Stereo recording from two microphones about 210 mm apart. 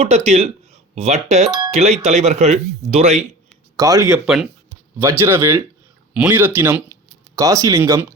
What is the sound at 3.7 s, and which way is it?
Speech, 15° right (ahead or behind).